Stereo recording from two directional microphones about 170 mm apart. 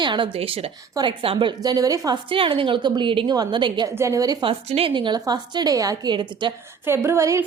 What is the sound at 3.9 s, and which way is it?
Speech, 15° right (ahead or behind).